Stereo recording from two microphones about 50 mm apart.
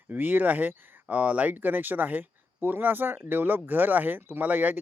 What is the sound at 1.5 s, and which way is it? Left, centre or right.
Speech, right.